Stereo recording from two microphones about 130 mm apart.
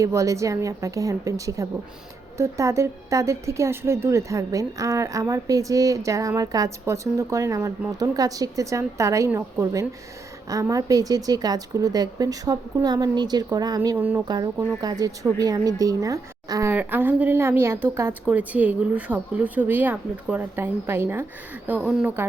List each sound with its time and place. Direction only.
0.0 s speech: 25° right (ahead or behind)
13.9 s a woman's voice: 15° right (ahead or behind)
14.3 s speech: 30° right (ahead or behind)
16.7 s a woman's voice: 15° right (ahead or behind)
21.8 s a woman's voice: 5° right (ahead or behind)